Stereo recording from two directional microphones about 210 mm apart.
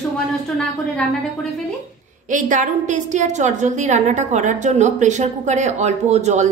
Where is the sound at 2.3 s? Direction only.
35° right (ahead or behind).